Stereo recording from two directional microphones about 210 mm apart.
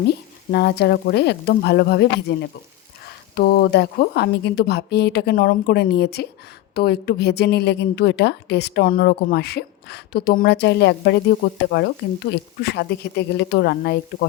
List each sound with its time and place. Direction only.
0.1 s a woman's voice: 50° left (ahead or behind)